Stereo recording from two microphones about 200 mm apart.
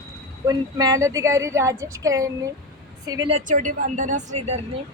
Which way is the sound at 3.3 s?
40° right (ahead or behind).